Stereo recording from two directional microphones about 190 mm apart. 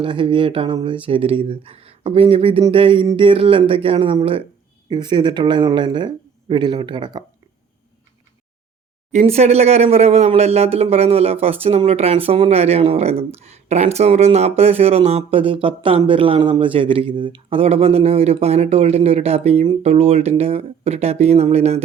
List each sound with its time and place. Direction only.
0.0 s speech: 25° right (ahead or behind)
9.1 s speech: 35° right (ahead or behind)